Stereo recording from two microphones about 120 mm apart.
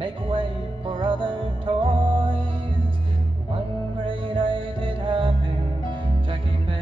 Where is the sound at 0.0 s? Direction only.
45° right (ahead or behind).